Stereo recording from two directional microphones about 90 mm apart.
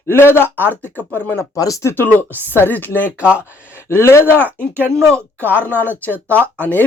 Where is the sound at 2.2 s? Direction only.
20° right (ahead or behind).